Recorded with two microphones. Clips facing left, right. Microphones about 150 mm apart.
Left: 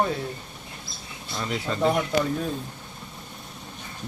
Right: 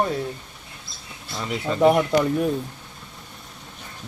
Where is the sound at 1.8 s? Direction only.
70° right (ahead or behind).